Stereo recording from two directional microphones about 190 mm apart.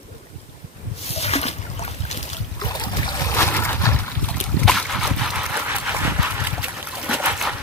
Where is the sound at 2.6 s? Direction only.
20° left (ahead or behind).